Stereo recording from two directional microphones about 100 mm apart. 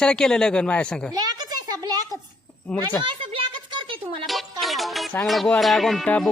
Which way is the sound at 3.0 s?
55° right (ahead or behind).